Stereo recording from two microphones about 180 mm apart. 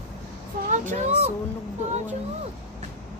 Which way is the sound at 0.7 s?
45° right (ahead or behind).